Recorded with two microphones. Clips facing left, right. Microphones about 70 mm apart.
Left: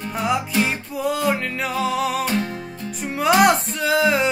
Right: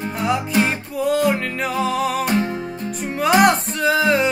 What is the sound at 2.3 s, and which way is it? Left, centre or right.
Music, right.